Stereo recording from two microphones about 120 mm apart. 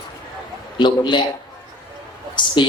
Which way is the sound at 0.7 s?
40° left (ahead or behind).